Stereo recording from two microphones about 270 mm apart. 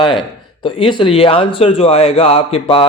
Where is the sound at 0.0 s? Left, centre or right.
Centre.